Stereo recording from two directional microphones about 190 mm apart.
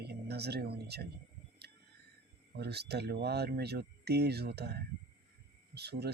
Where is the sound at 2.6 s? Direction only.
60° right (ahead or behind).